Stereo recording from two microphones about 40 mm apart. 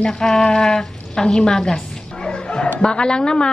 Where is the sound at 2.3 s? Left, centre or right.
Left.